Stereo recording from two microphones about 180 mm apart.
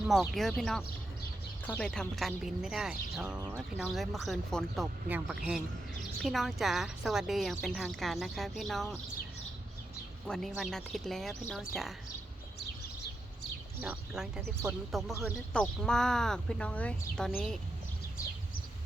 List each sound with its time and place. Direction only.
0.0 s a woman's voice: centre (ahead or behind)
10.2 s a woman's voice: 5° left (ahead or behind)
13.8 s a woman's voice: 5° right (ahead or behind)
15.5 s a woman's voice: 5° left (ahead or behind)